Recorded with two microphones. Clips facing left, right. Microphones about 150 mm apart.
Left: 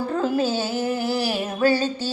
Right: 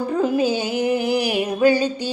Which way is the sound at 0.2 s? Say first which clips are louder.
Right 3 dB; 15° right (ahead or behind).